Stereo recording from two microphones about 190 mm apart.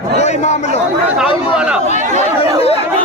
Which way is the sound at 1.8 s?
40° right (ahead or behind).